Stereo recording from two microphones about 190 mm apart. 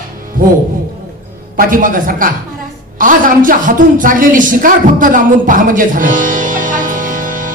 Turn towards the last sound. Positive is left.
turn(degrees=-45)  # may be behind; listen again after turning